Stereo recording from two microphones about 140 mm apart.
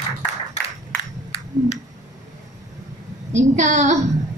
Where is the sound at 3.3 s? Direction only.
60° right (ahead or behind).